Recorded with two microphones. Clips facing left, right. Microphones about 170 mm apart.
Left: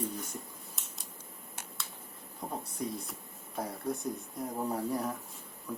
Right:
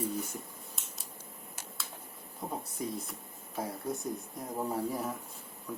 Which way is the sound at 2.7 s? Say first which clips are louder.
Even; centre (ahead or behind).